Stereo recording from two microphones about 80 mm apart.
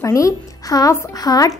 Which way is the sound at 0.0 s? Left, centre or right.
Left.